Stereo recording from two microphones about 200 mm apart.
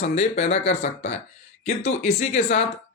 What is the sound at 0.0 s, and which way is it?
Speech, 35° left (ahead or behind).